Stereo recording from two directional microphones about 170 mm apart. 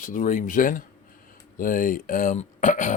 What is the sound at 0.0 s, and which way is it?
Speech, 50° left (ahead or behind).